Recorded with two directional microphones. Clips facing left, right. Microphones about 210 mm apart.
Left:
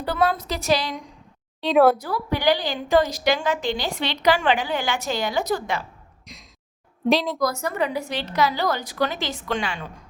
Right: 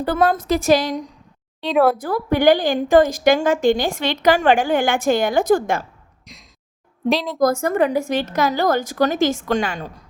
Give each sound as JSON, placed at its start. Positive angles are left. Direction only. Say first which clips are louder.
{"t": 0.0, "sound": "a woman's voice", "louder": "right 4 dB", "side_deg": -50}
{"t": 1.6, "sound": "a woman's voice", "louder": "even", "side_deg": 0}
{"t": 2.0, "sound": "a woman's voice", "louder": "right 7 dB", "side_deg": -50}
{"t": 6.2, "sound": "sigh", "louder": "even", "side_deg": 0}
{"t": 7.0, "sound": "a woman's voice", "louder": "right 1 dB", "side_deg": 0}
{"t": 7.3, "sound": "a woman's voice", "louder": "right 7 dB", "side_deg": -50}